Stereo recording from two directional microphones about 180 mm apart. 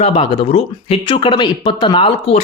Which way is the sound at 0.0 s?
35° left (ahead or behind).